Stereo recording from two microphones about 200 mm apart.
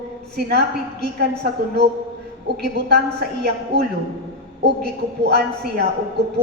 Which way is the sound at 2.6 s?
50° right (ahead or behind).